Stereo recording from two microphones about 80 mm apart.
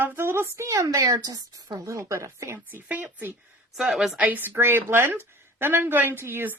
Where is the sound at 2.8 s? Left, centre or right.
Centre.